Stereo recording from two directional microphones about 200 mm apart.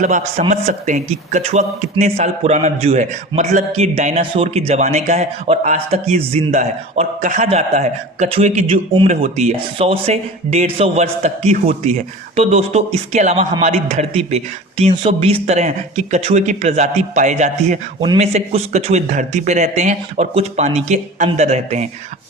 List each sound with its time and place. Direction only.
0.0 s a man's voice: 40° right (ahead or behind)